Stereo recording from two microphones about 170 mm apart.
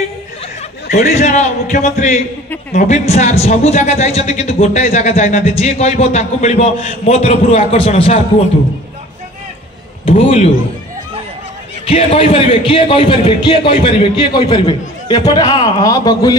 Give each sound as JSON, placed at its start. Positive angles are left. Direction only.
{"t": 1.0, "sound": "speech", "side_deg": 45}
{"t": 10.0, "sound": "speech", "side_deg": 40}
{"t": 11.8, "sound": "speech", "side_deg": 35}
{"t": 15.8, "sound": "speech", "side_deg": 20}